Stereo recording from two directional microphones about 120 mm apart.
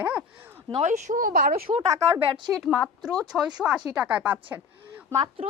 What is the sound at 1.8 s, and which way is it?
Speech, 25° right (ahead or behind).